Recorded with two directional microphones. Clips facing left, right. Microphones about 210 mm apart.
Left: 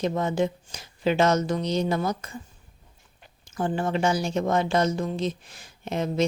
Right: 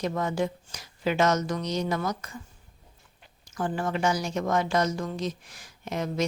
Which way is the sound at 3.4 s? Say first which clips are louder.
Left 3 dB; 25° left (ahead or behind).